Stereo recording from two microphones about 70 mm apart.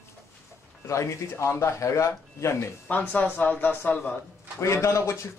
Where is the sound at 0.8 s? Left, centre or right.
Left.